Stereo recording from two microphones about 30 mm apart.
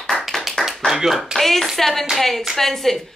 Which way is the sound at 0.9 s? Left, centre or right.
Centre.